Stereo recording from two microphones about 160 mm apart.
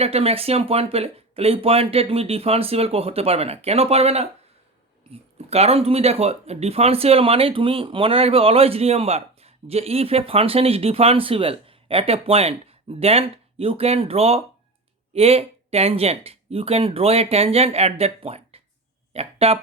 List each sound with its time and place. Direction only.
0.0 s speech: 40° right (ahead or behind)
5.5 s speech: 40° right (ahead or behind)